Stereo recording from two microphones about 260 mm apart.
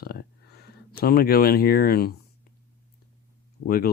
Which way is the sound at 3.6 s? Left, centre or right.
Left.